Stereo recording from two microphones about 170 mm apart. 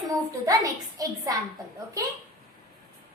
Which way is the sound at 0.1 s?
20° right (ahead or behind).